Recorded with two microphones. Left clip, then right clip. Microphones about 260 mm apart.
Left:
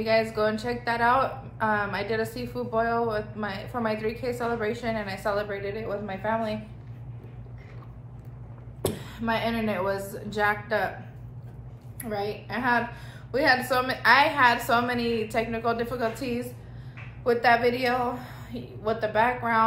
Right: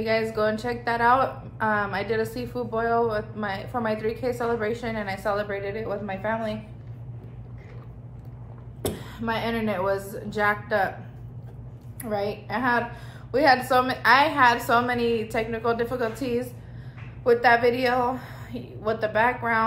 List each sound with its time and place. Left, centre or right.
0.0 s a woman's voice: centre
8.8 s speech: centre
12.0 s a woman's voice: centre